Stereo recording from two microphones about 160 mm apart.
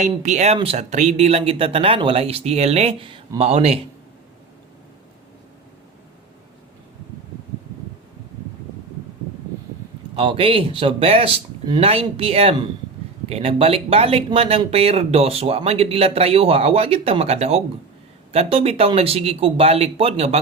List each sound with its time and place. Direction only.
0.0 s speech: 45° right (ahead or behind)
10.2 s speech: 35° right (ahead or behind)